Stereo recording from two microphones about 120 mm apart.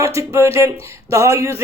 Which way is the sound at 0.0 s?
25° right (ahead or behind).